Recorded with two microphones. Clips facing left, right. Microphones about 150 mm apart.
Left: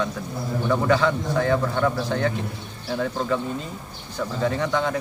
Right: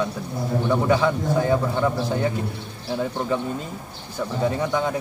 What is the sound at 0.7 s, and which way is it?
A man's voice, 15° right (ahead or behind).